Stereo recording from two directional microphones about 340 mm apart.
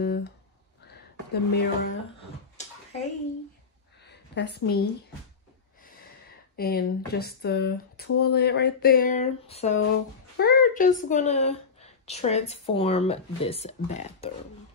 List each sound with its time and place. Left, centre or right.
0.0 s a sound: left
1.3 s a woman's voice: left
2.5 s bathtub: centre
4.1 s a woman's voice: left
6.5 s a woman's voice: left